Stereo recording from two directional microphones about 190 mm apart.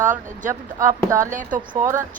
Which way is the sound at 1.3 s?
45° right (ahead or behind).